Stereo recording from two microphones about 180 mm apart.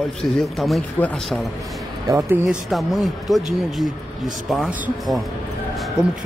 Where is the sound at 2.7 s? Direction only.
Centre (ahead or behind).